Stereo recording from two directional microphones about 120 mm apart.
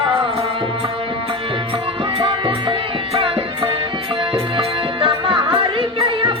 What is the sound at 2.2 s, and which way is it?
Music, 45° right (ahead or behind).